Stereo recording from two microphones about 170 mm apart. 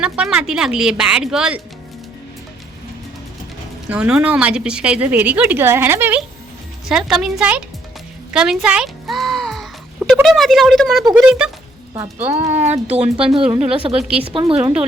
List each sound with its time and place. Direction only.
0.0 s speech: 5° right (ahead or behind)
3.8 s a woman's voice: 5° right (ahead or behind)
8.3 s music: 5° right (ahead or behind)
10.2 s speech: centre (ahead or behind)
11.9 s speech: 35° right (ahead or behind)
12.9 s speech: 5° right (ahead or behind)
13.5 s speech: 35° right (ahead or behind)
13.9 s speech: 5° right (ahead or behind)
14.3 s speech: 30° right (ahead or behind)